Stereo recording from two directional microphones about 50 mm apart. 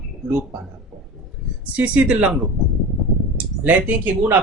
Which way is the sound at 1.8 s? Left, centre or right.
Right.